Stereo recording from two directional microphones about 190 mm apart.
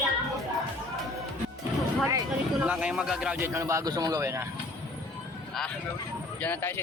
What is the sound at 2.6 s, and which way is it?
Speech, 5° right (ahead or behind).